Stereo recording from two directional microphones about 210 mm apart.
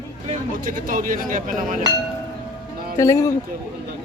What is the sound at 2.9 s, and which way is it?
Speech, 15° left (ahead or behind).